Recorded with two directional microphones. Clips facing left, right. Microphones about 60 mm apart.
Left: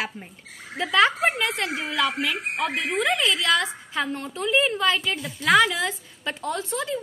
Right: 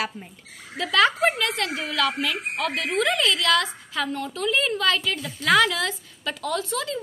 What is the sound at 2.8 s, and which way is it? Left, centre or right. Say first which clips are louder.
A woman's voice: right 1 dB; centre.